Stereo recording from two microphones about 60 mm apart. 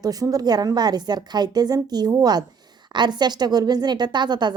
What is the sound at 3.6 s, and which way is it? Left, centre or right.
Speech, right.